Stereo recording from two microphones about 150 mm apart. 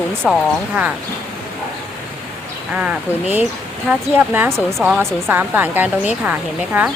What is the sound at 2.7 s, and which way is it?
Speech, 10° right (ahead or behind).